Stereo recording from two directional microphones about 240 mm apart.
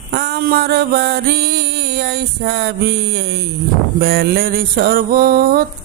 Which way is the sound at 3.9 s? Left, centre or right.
Right.